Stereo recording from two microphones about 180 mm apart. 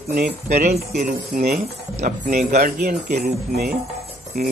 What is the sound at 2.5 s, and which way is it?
A man's voice, 55° right (ahead or behind).